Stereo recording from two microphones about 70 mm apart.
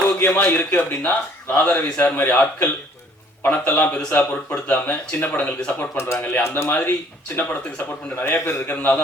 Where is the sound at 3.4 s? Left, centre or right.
Left.